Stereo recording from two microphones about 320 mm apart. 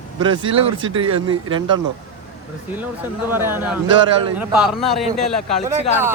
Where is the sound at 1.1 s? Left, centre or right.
Centre.